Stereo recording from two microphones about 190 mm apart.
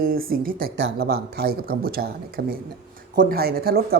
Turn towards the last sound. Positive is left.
turn(degrees=-55)  # may be behind; listen again after turning